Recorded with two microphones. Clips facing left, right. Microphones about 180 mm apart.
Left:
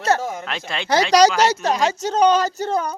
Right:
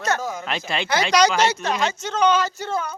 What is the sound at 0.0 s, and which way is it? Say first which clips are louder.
Speech: left 4 dB; 30° left (ahead or behind).